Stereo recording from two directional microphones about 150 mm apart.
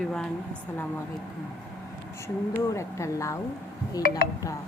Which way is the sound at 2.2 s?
20° left (ahead or behind).